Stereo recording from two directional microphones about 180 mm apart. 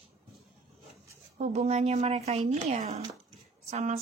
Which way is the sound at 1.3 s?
35° right (ahead or behind).